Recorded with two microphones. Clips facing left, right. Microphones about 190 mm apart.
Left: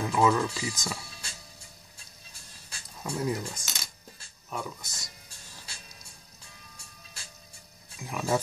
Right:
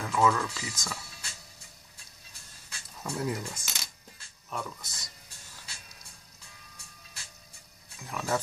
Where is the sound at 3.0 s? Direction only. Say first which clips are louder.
Left 2 dB; centre (ahead or behind).